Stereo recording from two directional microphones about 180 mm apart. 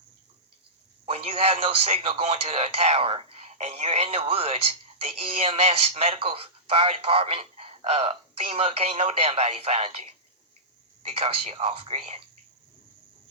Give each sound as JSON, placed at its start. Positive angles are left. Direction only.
{"t": 1.0, "sound": "speech", "side_deg": -35}
{"t": 11.0, "sound": "speech", "side_deg": -35}